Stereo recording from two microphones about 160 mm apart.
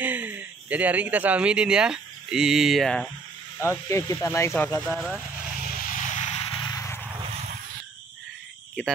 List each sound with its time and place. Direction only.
0.0 s speech: 10° right (ahead or behind)
3.5 s speech: 15° left (ahead or behind)
4.8 s speech: centre (ahead or behind)
5.8 s a sound: 55° left (ahead or behind); by 6.7 s 35° left (ahead or behind)
6.7 s vehicle: 15° left (ahead or behind)